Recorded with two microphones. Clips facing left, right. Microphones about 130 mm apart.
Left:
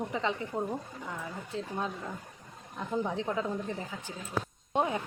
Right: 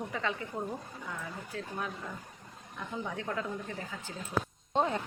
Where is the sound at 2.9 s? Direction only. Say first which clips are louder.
Left 6 dB; 30° left (ahead or behind).